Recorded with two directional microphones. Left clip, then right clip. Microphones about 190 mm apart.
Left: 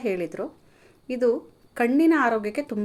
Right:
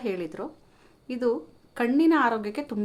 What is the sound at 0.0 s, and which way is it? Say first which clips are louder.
Speech: left 4 dB; 15° left (ahead or behind).